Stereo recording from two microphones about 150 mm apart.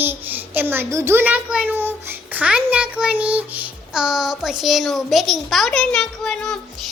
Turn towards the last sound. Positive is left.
turn(degrees=5)  # may be behind; listen again after turning